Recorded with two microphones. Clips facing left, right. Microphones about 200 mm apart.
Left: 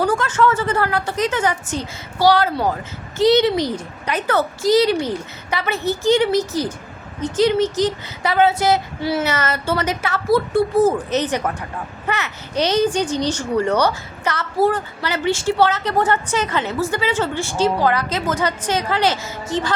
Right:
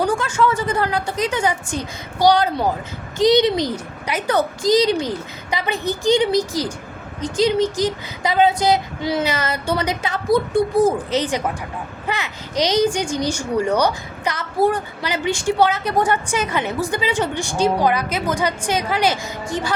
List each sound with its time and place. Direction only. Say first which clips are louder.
0.0 s a woman's voice: left 1 dB; 10° right (ahead or behind)